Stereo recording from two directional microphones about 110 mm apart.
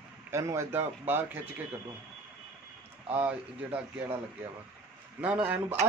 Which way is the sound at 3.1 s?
15° right (ahead or behind).